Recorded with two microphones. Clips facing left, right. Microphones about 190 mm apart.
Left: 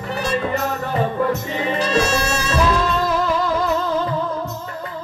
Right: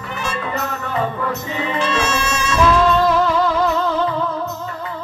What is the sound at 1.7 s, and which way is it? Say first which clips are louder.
Music: left 2 dB; 35° left (ahead or behind).